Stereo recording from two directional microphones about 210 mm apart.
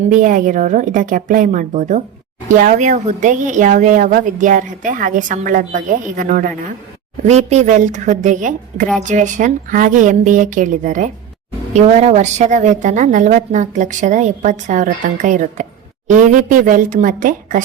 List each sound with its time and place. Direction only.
0.0 s a woman's voice: 40° right (ahead or behind)